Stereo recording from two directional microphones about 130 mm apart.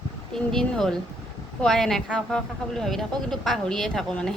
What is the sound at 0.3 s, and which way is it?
Speech, 5° left (ahead or behind).